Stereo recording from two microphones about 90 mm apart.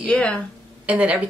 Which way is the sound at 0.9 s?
15° right (ahead or behind).